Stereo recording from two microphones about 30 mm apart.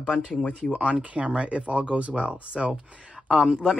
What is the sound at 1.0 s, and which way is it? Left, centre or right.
Speech, right.